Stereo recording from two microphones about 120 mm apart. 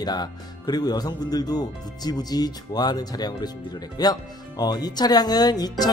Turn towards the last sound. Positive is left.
turn(degrees=35)  # may be behind; listen again after turning